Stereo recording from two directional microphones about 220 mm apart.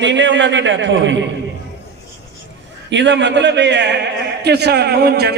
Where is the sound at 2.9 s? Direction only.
55° right (ahead or behind).